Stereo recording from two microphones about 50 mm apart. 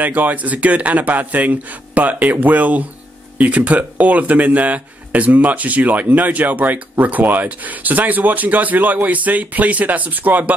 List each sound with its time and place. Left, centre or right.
0.0 s speech: right